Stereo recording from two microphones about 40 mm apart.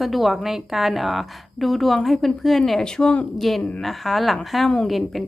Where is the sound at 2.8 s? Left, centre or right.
Centre.